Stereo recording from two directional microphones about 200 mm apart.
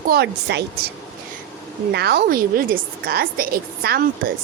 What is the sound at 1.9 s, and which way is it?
A woman's voice, 55° right (ahead or behind).